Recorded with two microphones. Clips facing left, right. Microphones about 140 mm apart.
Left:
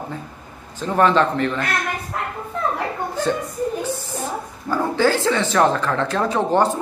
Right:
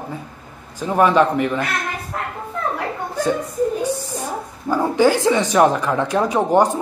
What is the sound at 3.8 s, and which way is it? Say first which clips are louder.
Speech: right 3 dB; 15° right (ahead or behind).